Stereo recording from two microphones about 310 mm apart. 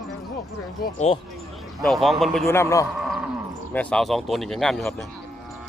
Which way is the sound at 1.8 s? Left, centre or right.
Centre.